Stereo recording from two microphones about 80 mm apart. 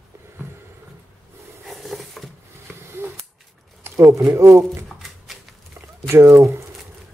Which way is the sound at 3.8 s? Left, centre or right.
Right.